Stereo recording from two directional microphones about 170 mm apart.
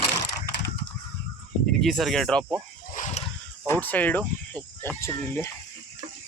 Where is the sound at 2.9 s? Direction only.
45° left (ahead or behind).